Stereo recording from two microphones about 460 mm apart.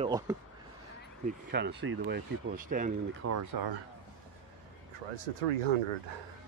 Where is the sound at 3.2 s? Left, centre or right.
Right.